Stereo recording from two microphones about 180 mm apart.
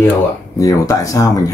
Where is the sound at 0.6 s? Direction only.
20° left (ahead or behind).